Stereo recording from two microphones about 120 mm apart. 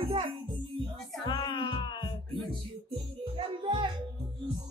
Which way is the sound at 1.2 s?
45° left (ahead or behind).